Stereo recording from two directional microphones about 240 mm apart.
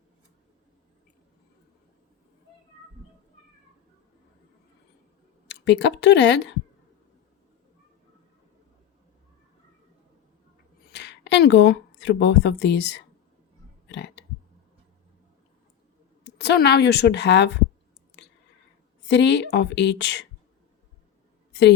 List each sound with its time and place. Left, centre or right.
5.5 s speech: left
10.9 s a woman's voice: left
13.8 s burping: left
16.2 s speech: left
19.0 s a woman's voice: left